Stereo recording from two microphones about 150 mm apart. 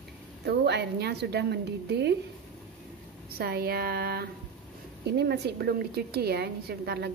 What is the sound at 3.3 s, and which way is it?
A woman's voice, 90° right.